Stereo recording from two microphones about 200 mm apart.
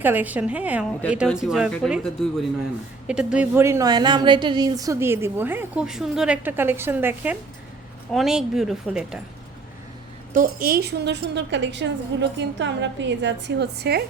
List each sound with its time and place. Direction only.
0.0 s speech: 10° right (ahead or behind)
3.1 s a woman's voice: 5° right (ahead or behind)
10.3 s a woman's voice: 45° right (ahead or behind)